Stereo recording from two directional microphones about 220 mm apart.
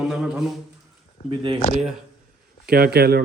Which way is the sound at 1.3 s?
20° right (ahead or behind).